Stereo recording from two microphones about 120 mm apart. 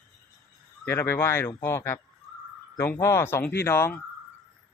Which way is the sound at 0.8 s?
20° left (ahead or behind).